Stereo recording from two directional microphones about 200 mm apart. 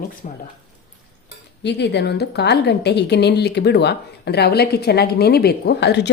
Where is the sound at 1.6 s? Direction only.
60° left (ahead or behind).